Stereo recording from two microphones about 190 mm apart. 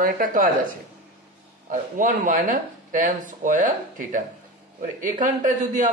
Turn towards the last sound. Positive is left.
turn(degrees=-45)  # may be behind; listen again after turning